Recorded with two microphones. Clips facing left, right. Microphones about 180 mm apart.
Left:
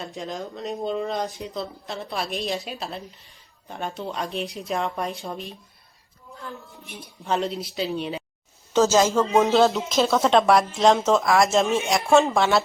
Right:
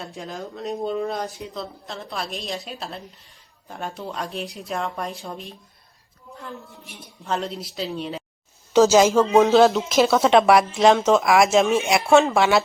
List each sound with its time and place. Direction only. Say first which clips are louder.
0.0 s speech: left 1 dB; centre (ahead or behind)
6.7 s speech: left 2 dB; centre (ahead or behind)
8.7 s speech: right 4 dB; 15° right (ahead or behind)
9.4 s speech: right 3 dB; centre (ahead or behind)